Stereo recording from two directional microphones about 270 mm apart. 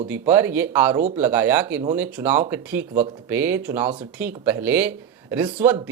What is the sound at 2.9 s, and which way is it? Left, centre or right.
Speech, centre.